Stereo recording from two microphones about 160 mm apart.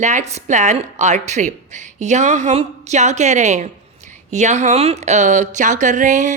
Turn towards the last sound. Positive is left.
turn(degrees=-50)  # may be behind; listen again after turning